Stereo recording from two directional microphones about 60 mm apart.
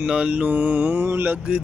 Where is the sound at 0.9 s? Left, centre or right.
Right.